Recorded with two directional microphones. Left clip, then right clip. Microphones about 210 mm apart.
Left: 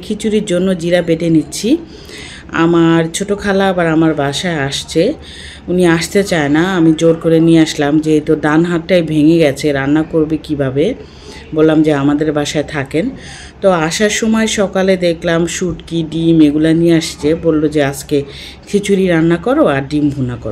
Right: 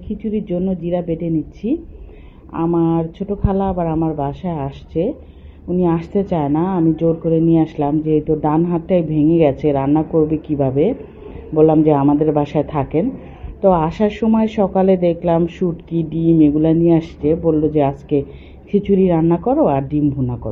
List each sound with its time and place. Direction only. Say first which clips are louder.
0.2 s speech: left 8 dB; 10° left (ahead or behind)
3.3 s speech: left 6 dB; 40° left (ahead or behind)
4.3 s speech: left 8 dB; 5° left (ahead or behind)